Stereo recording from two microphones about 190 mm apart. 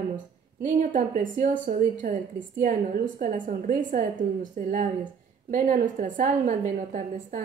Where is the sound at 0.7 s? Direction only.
40° right (ahead or behind).